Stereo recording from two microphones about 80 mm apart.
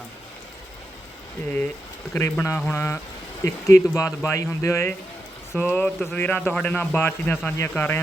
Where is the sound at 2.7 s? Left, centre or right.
Left.